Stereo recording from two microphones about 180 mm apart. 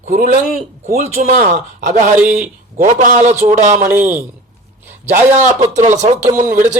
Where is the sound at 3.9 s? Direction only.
10° right (ahead or behind).